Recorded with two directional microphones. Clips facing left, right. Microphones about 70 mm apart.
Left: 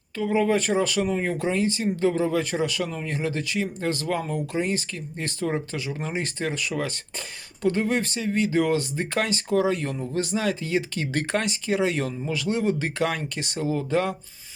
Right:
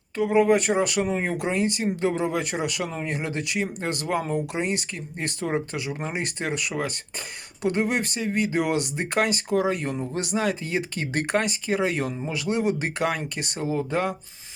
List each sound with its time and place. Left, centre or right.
0.2 s speech: centre
1.4 s speech: centre
5.4 s speech: right
11.3 s speech: centre
13.9 s speech: centre